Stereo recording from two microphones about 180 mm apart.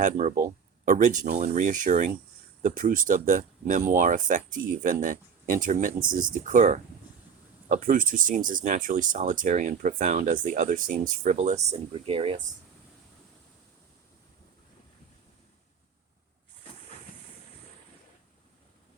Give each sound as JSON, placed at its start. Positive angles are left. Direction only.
{"t": 0.0, "sound": "speech", "side_deg": -45}